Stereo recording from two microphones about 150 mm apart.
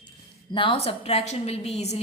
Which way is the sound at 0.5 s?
35° left (ahead or behind).